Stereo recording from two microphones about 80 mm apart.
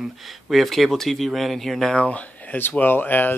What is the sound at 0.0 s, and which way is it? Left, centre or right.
Speech, centre.